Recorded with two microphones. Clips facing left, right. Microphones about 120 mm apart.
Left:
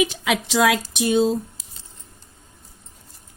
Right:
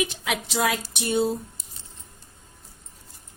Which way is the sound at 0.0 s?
90° left.